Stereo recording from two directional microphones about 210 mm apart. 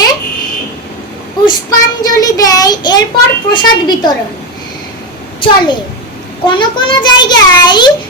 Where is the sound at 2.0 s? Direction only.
15° left (ahead or behind).